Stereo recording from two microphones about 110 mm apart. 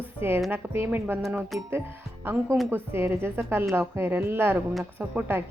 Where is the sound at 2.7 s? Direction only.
20° right (ahead or behind).